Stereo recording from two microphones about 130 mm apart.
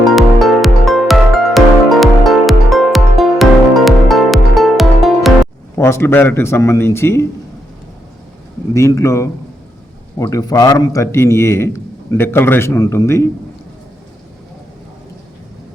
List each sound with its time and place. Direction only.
0.0 s music: centre (ahead or behind)
5.7 s a man's voice: 20° left (ahead or behind)
8.7 s a man's voice: 20° left (ahead or behind)